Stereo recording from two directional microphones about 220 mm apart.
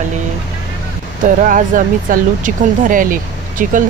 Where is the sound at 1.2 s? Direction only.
35° right (ahead or behind).